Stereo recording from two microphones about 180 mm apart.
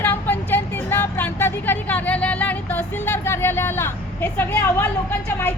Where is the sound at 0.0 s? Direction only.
10° left (ahead or behind).